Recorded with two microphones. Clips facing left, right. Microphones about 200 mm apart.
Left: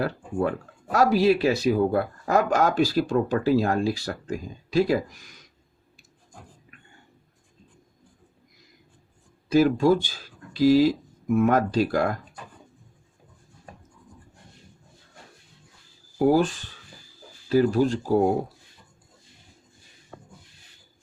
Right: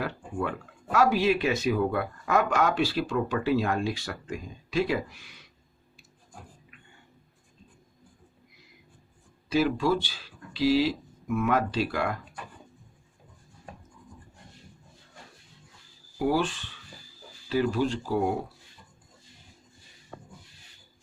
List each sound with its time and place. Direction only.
0.0 s speech: 40° left (ahead or behind)
9.5 s speech: 45° left (ahead or behind)
16.1 s speech: 40° left (ahead or behind)